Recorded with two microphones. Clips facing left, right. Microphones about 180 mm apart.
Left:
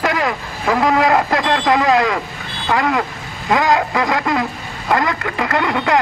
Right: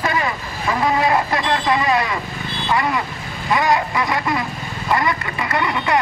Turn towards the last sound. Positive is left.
turn(degrees=80)